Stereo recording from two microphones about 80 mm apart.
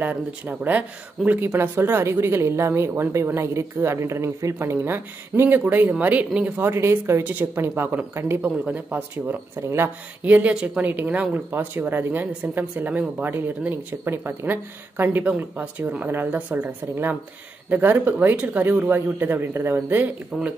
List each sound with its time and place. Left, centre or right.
0.0 s speech: right
6.7 s speech: right
8.4 s speech: centre
9.6 s speech: right
10.2 s speech: centre
20.3 s speech: centre